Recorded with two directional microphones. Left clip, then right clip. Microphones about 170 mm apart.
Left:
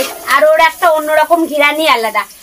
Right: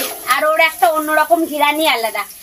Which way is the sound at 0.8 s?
20° left (ahead or behind).